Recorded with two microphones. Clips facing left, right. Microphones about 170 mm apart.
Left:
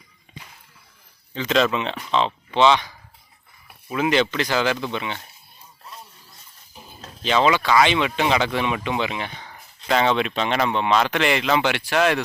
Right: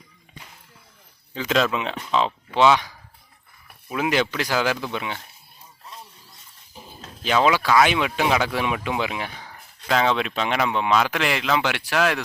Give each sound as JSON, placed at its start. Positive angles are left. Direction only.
{"t": 1.3, "sound": "speech", "side_deg": -5}
{"t": 7.3, "sound": "speech", "side_deg": -5}